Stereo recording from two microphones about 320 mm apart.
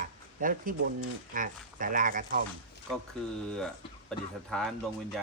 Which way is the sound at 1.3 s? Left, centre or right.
Right.